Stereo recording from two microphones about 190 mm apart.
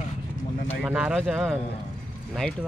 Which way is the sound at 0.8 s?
5° right (ahead or behind).